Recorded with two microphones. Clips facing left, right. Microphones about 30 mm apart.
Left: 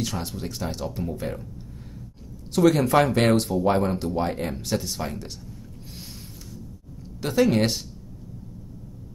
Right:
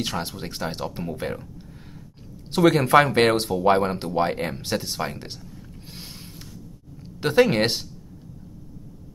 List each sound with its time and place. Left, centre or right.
0.0 s speech: right
2.5 s speech: right
7.2 s speech: right